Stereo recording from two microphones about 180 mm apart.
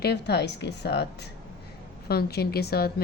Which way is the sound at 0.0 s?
65° left (ahead or behind).